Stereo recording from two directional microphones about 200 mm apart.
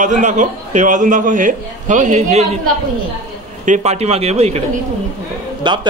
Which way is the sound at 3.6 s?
35° right (ahead or behind).